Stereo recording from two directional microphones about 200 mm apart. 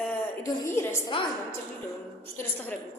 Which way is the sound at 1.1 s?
25° left (ahead or behind).